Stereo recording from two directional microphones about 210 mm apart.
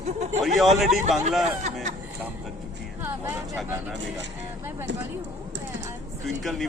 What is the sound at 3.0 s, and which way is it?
Speech, 10° right (ahead or behind).